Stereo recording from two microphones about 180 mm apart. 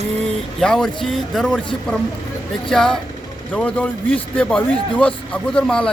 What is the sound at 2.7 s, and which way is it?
Speech, 5° left (ahead or behind).